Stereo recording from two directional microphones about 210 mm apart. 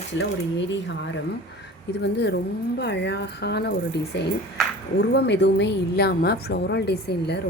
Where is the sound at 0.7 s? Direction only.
60° left (ahead or behind).